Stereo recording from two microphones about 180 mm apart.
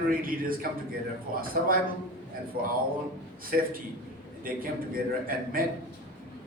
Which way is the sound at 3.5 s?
55° right (ahead or behind).